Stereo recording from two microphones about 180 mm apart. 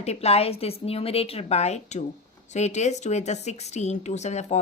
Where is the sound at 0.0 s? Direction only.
35° left (ahead or behind).